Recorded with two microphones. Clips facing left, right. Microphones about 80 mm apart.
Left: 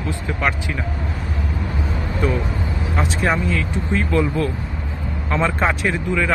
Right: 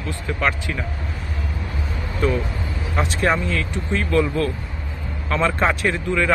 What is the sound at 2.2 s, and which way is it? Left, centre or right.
Speech, centre.